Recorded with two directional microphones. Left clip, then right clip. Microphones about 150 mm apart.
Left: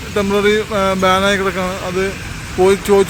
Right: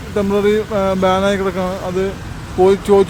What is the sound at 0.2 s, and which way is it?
Speech, 15° right (ahead or behind).